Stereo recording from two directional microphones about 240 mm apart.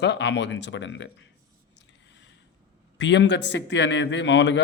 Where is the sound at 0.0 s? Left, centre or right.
Left.